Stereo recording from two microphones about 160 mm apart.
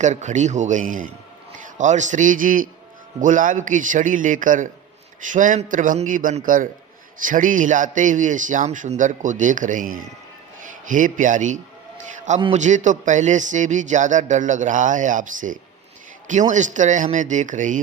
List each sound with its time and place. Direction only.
0.0 s a man's voice: 50° right (ahead or behind)